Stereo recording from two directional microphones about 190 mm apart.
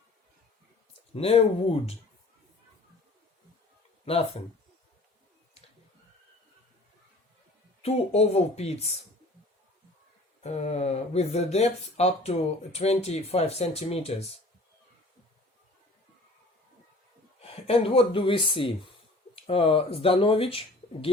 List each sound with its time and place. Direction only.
1.1 s speech: 30° left (ahead or behind)
4.0 s speech: 30° left (ahead or behind)
7.8 s speech: 30° left (ahead or behind)
10.4 s speech: 35° left (ahead or behind)
17.4 s speech: 30° left (ahead or behind)